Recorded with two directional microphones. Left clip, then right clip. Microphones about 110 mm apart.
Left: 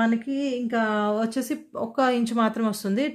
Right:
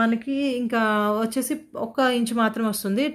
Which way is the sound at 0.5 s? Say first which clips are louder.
Right 2 dB; 30° right (ahead or behind).